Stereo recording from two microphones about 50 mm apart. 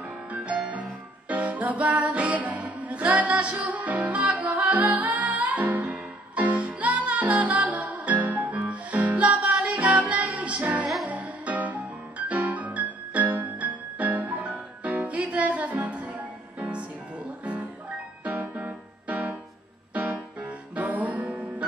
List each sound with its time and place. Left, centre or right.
0.3 s music: right
11.1 s piano: right
16.5 s music: right
18.6 s music: right
20.7 s music: right